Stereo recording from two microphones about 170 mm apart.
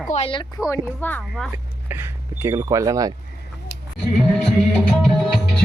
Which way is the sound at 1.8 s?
15° right (ahead or behind).